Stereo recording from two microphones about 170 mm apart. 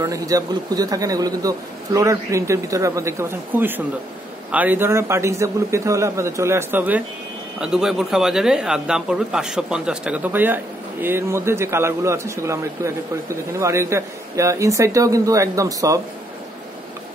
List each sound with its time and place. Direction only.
0.0 s a man's voice: 20° right (ahead or behind)